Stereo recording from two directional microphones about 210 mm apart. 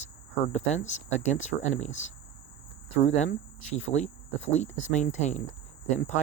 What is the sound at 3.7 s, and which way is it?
Speech, 35° left (ahead or behind).